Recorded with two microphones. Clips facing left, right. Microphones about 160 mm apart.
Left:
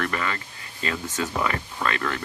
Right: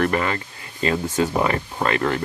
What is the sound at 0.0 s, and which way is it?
Speech, 30° right (ahead or behind).